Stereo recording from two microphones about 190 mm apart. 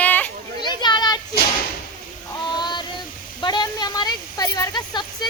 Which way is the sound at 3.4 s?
25° left (ahead or behind).